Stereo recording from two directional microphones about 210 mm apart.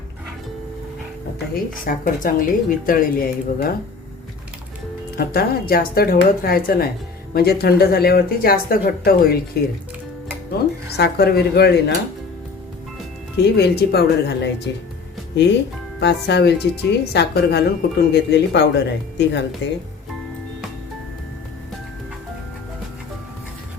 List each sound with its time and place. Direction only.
1.5 s a woman's voice: 40° left (ahead or behind)
5.1 s speech: 45° left (ahead or behind)
10.9 s speech: 50° left (ahead or behind)
13.3 s speech: 50° left (ahead or behind)
16.0 s speech: 55° left (ahead or behind)